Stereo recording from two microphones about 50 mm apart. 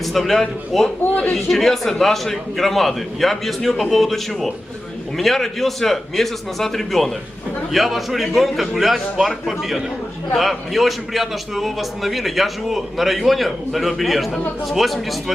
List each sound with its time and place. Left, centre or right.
0.0 s a man's voice: centre
1.0 s a man's voice: left
1.3 s a man's voice: centre